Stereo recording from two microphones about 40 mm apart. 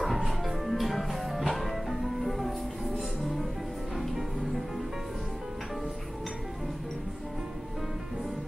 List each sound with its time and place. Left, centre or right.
0.2 s music: centre